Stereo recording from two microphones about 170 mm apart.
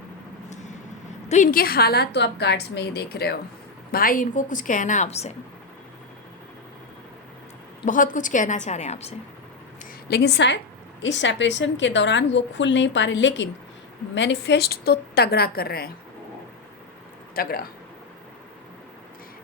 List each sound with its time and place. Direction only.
1.3 s a woman's voice: 50° left (ahead or behind); by 3.3 s 70° left (ahead or behind)
3.9 s a woman's voice: 55° left (ahead or behind); by 5.3 s 40° left (ahead or behind)
7.9 s a woman's voice: 50° left (ahead or behind)
10.1 s a woman's voice: 85° left; by 15.9 s 65° left (ahead or behind)
17.3 s a woman's voice: 60° left (ahead or behind)